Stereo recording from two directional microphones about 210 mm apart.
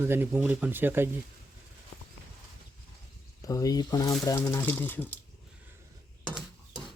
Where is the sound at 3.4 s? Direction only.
15° left (ahead or behind).